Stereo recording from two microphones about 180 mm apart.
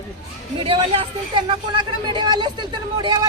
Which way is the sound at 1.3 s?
25° right (ahead or behind).